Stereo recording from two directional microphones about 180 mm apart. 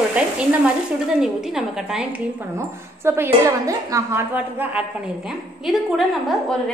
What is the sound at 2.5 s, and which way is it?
A woman's voice, 15° right (ahead or behind).